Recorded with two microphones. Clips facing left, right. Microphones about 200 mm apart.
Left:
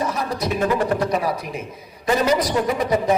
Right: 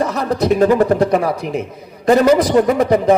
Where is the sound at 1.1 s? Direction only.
65° right (ahead or behind).